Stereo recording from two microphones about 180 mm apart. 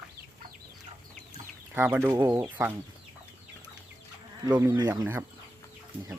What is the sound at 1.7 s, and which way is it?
Speech, 10° right (ahead or behind).